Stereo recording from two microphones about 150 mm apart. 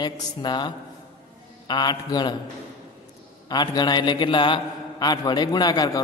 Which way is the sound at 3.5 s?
30° left (ahead or behind).